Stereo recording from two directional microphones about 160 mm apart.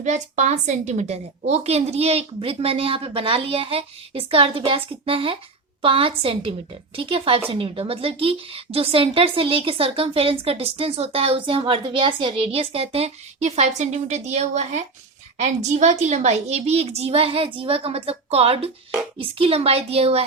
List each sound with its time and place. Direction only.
0.0 s speech: 50° right (ahead or behind)